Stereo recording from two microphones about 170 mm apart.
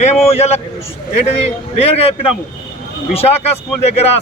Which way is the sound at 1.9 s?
35° left (ahead or behind).